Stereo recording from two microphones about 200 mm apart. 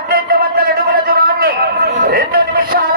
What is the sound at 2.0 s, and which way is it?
Music, 50° right (ahead or behind).